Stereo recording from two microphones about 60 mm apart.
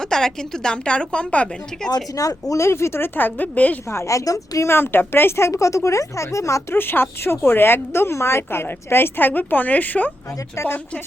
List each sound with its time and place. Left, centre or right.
0.0 s a woman's voice: centre
2.1 s speech: left
2.6 s speech: left
3.2 s a woman's voice: left
3.9 s speech: left
4.7 s speech: left
5.5 s speech: left
6.7 s speech: left